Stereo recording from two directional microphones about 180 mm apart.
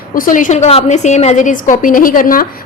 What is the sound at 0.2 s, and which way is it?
A woman's voice, 45° left (ahead or behind).